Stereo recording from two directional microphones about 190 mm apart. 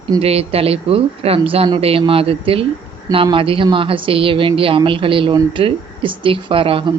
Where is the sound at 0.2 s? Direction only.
30° right (ahead or behind).